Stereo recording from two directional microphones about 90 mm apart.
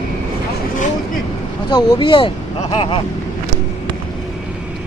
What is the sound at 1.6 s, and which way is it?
Speech, 55° left (ahead or behind).